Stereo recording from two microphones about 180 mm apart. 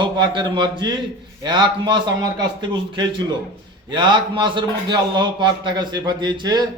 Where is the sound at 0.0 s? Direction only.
25° right (ahead or behind).